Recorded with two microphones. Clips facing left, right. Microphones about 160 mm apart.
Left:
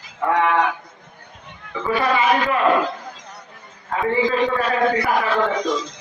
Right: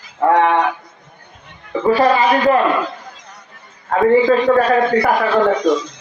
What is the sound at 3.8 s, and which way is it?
Speech, 50° right (ahead or behind).